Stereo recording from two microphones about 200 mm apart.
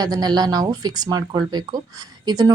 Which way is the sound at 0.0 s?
20° right (ahead or behind).